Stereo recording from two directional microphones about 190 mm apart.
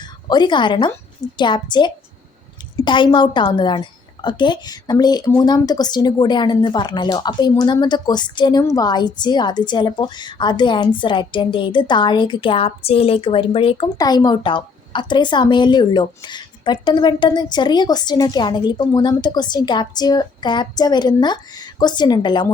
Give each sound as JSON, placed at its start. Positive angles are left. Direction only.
{"t": 0.0, "sound": "speech", "side_deg": 20}